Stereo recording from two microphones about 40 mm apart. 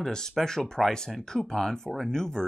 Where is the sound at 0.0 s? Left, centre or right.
Centre.